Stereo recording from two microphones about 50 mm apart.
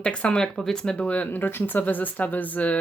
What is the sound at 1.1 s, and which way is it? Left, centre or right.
Speech, left.